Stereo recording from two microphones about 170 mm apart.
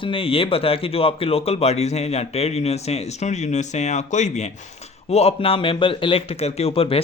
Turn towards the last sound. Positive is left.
turn(degrees=35)  # may be behind; listen again after turning